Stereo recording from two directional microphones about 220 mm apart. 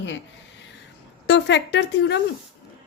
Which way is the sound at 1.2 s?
55° left (ahead or behind).